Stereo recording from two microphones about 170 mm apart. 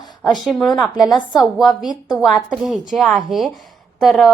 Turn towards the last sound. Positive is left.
turn(degrees=0)  # may be behind; listen again after turning